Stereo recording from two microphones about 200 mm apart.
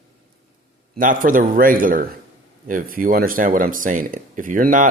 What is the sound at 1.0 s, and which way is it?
Speech, 45° right (ahead or behind).